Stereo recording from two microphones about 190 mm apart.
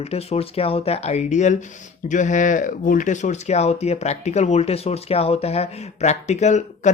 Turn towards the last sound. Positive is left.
turn(degrees=40)  # may be behind; listen again after turning